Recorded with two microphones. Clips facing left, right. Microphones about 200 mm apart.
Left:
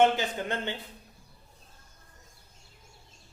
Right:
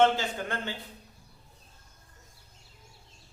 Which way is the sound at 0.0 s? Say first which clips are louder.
Even; 20° left (ahead or behind).